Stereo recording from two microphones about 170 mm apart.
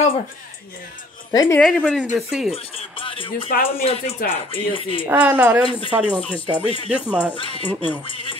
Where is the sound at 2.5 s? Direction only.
35° left (ahead or behind).